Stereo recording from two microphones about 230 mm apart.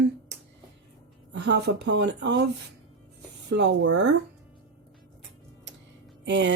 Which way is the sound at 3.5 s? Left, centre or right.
Right.